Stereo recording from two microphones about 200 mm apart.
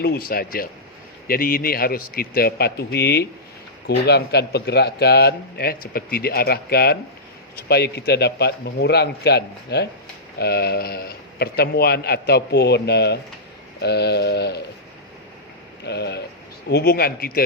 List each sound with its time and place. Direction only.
0.0 s a man's voice: 50° left (ahead or behind)
15.8 s a man's voice: 55° left (ahead or behind)